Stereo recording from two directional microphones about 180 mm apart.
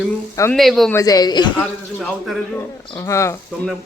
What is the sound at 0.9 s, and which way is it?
Speech, 20° left (ahead or behind).